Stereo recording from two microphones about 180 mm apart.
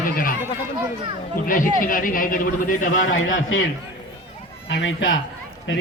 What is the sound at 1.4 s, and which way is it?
A man's voice, 50° left (ahead or behind).